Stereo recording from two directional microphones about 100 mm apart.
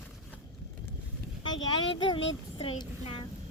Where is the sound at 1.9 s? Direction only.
55° left (ahead or behind).